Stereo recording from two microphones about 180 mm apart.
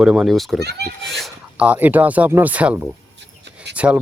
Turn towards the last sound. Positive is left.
turn(degrees=-5)  # may be behind; listen again after turning